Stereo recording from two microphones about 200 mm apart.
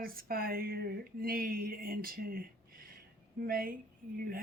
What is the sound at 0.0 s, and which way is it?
Speech, 45° right (ahead or behind).